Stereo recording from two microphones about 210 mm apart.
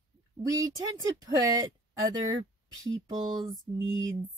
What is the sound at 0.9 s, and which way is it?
A woman's voice, 15° right (ahead or behind).